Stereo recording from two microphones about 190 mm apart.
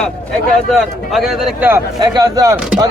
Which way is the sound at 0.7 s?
Centre (ahead or behind).